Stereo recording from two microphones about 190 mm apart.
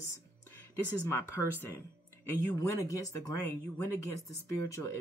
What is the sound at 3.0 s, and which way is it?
Speech, 20° left (ahead or behind).